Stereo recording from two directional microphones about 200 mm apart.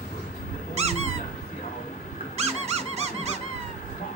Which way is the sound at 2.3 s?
30° right (ahead or behind).